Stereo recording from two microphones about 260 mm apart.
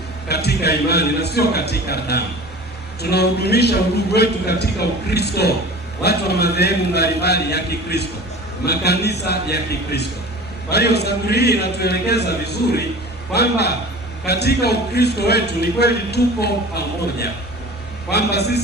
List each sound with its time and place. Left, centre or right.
0.3 s a man's voice: left